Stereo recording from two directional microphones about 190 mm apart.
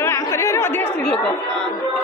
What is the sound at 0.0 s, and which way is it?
Chatter, 15° left (ahead or behind).